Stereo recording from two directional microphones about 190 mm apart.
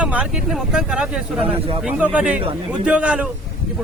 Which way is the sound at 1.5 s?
30° right (ahead or behind).